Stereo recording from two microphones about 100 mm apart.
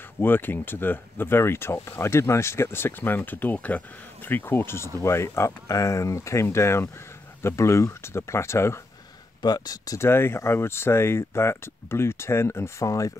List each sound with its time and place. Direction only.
0.2 s speech: 20° left (ahead or behind)
9.4 s speech: 40° left (ahead or behind)
9.9 s speech: 25° left (ahead or behind)